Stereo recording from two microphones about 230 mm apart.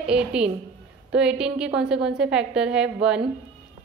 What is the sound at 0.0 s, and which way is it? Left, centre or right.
A woman's voice, centre.